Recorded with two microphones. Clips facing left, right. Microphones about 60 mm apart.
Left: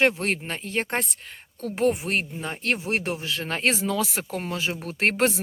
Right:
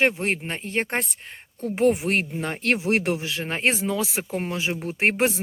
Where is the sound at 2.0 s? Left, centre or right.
Right.